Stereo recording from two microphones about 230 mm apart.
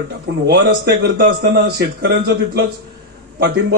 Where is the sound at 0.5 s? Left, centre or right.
Right.